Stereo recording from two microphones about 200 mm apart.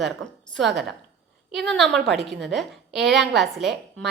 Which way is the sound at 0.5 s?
Centre (ahead or behind).